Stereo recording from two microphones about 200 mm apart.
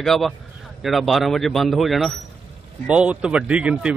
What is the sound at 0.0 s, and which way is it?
Speech, centre (ahead or behind).